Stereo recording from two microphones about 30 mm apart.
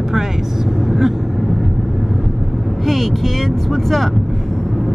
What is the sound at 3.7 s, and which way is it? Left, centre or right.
Speech, centre.